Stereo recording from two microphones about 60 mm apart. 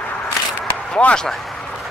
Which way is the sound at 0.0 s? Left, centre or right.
Left.